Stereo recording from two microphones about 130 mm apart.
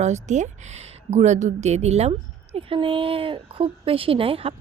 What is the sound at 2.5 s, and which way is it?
Speech, 40° right (ahead or behind).